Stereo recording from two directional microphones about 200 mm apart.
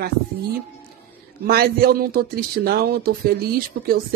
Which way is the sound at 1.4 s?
50° right (ahead or behind).